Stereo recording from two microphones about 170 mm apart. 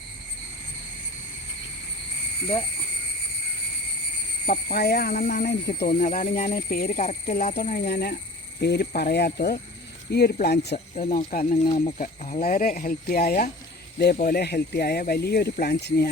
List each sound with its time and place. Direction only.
4.4 s speech: 60° left (ahead or behind)
5.5 s speech: 70° left (ahead or behind)
5.9 s speech: 40° left (ahead or behind)
6.1 s speech: 55° left (ahead or behind)
7.0 s speech: 40° left (ahead or behind); by 10.8 s 75° left (ahead or behind)
10.9 s speech: 45° left (ahead or behind); by 16.0 s 60° left (ahead or behind)